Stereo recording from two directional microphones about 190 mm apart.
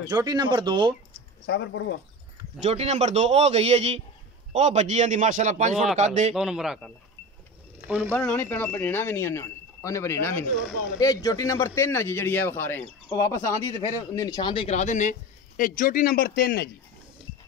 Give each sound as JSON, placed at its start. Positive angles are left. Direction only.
{"t": 0.0, "sound": "speech", "side_deg": -20}
{"t": 1.4, "sound": "speech", "side_deg": 70}
{"t": 2.6, "sound": "a man's voice", "side_deg": -35}
{"t": 6.3, "sound": "a man's voice", "side_deg": -5}
{"t": 8.1, "sound": "a man's voice", "side_deg": 5}